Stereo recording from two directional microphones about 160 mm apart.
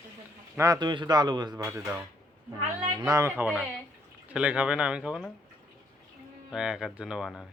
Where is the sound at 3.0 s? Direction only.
20° right (ahead or behind).